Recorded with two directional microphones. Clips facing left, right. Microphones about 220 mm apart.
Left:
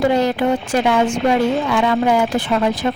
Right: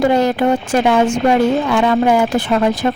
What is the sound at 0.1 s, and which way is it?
Speech, 50° right (ahead or behind).